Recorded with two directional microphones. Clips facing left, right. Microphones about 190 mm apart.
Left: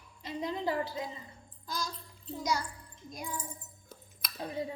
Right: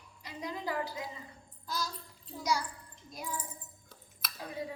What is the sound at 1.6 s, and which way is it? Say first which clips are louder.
Child singing: even; 5° right (ahead or behind).